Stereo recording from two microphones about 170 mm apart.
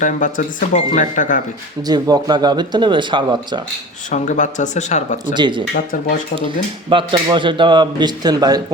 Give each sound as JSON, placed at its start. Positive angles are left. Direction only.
{"t": 0.0, "sound": "speech", "side_deg": 50}
{"t": 1.9, "sound": "speech", "side_deg": -20}
{"t": 4.1, "sound": "speech", "side_deg": 45}
{"t": 5.3, "sound": "speech", "side_deg": -25}
{"t": 5.7, "sound": "speech", "side_deg": 55}
{"t": 6.9, "sound": "speech", "side_deg": -30}